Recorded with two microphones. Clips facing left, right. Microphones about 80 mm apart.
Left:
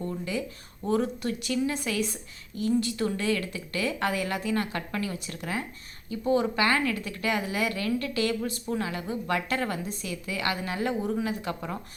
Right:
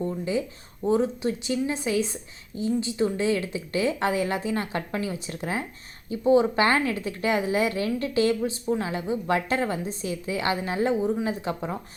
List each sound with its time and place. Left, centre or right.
0.9 s a woman's voice: right